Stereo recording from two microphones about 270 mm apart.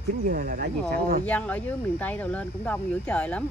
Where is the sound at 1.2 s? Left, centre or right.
Centre.